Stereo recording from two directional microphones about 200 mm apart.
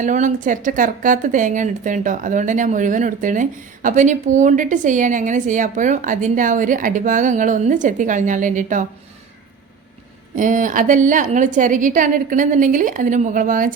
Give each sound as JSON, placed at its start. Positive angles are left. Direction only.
{"t": 0.0, "sound": "speech", "side_deg": -40}
{"t": 10.3, "sound": "speech", "side_deg": -40}